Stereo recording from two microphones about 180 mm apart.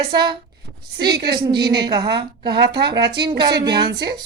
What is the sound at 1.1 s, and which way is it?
Speech, 60° right (ahead or behind).